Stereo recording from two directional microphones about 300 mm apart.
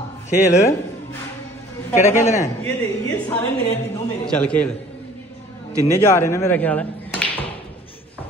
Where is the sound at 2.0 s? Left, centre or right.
Centre.